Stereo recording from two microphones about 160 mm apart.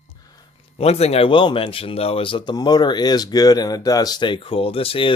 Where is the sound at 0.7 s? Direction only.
40° left (ahead or behind).